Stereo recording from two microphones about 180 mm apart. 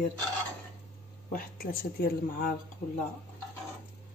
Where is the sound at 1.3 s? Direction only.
50° left (ahead or behind).